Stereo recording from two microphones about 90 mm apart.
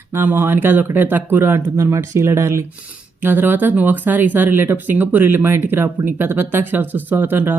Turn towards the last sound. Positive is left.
turn(degrees=-20)  # may be behind; listen again after turning